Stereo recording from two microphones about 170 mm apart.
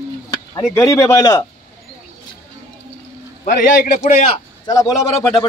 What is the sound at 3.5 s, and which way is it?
Speech, 50° left (ahead or behind).